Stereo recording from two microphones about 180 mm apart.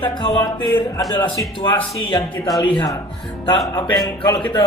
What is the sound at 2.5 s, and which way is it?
Speech, 5° left (ahead or behind).